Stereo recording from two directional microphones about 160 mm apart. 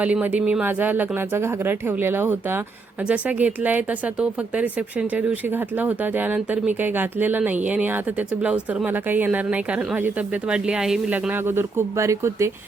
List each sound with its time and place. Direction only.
0.0 s speech: 10° right (ahead or behind)